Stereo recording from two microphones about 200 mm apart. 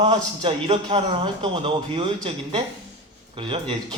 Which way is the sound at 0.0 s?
25° right (ahead or behind).